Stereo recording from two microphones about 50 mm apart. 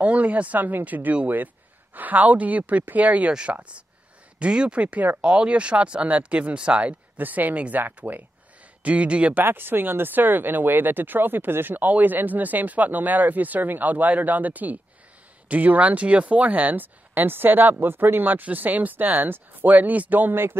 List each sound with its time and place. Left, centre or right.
0.0 s speech: right
4.4 s speech: centre
7.2 s speech: right
9.4 s speech: right